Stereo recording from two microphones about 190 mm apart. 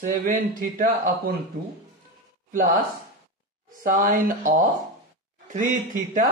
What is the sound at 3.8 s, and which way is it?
Speech, 45° right (ahead or behind).